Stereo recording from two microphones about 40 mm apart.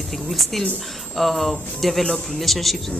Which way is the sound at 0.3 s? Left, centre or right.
Centre.